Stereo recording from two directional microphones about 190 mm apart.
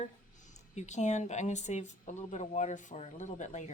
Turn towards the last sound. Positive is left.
turn(degrees=40)  # may be behind; listen again after turning